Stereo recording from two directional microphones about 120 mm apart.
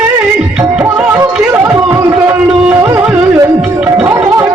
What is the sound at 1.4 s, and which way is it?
Chatter, 20° right (ahead or behind).